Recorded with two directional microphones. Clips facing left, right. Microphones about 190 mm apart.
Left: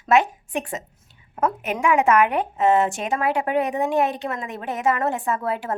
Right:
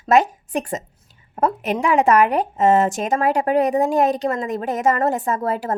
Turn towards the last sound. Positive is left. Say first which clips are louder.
# right 3 dB
turn(degrees=-40)  # may be behind; listen again after turning